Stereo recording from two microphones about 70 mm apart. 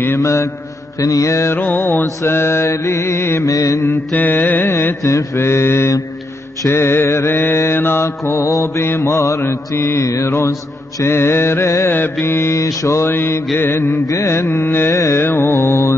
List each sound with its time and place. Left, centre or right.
0.2 s mantra: left
1.6 s carnatic music: left
2.2 s mantra: left
3.4 s mantra: left
3.9 s carnatic music: left
4.7 s mantra: left
8.3 s mantra: left
13.1 s mantra: left
14.0 s mantra: left
15.2 s mantra: left